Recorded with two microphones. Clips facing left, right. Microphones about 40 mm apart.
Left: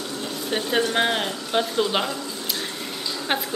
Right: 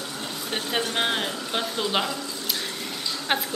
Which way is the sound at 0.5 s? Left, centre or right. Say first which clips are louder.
Left 5 dB; centre.